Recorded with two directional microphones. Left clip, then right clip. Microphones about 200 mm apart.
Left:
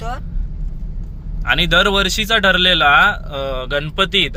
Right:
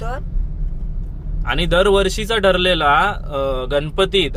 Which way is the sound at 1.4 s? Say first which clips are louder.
Left 2 dB; 10° right (ahead or behind).